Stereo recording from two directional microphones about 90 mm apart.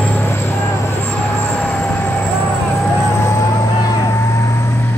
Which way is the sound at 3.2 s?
35° left (ahead or behind).